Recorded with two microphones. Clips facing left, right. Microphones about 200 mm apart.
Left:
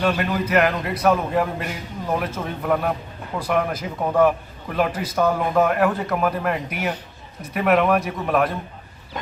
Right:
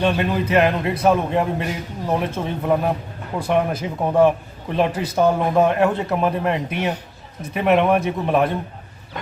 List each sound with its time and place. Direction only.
0.0 s a man's voice: 25° right (ahead or behind)